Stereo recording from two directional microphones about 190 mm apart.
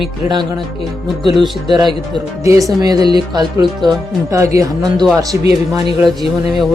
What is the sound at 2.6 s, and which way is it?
Speech, 20° right (ahead or behind).